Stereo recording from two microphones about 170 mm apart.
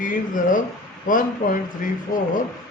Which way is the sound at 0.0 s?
50° left (ahead or behind).